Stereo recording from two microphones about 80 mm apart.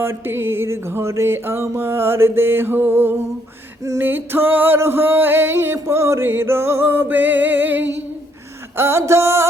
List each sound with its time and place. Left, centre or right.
0.0 s music: right
8.8 s music: right